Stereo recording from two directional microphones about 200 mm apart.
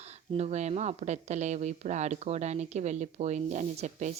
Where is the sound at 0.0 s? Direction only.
30° right (ahead or behind).